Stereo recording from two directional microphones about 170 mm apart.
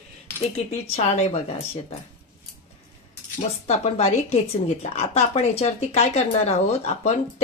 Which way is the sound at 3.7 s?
40° left (ahead or behind).